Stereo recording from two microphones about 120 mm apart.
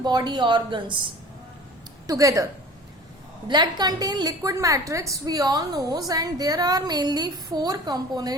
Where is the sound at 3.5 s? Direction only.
35° right (ahead or behind).